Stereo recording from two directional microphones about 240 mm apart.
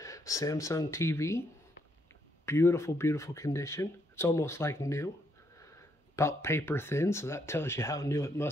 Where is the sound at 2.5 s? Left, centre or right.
Centre.